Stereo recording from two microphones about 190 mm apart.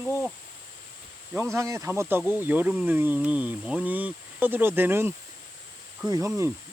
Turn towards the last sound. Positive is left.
turn(degrees=-20)  # may be behind; listen again after turning